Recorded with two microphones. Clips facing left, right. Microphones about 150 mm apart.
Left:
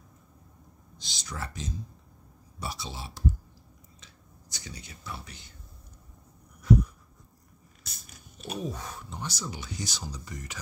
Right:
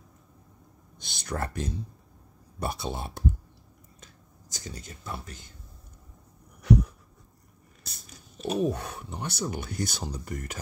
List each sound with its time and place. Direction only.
0.9 s speech: 55° right (ahead or behind)
4.0 s whispering: 45° right (ahead or behind)
6.6 s dog: 75° right (ahead or behind)
7.8 s a sound: 40° right (ahead or behind)
8.5 s speech: 65° right (ahead or behind)